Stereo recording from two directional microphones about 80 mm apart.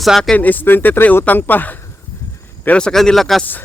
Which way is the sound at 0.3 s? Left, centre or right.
Left.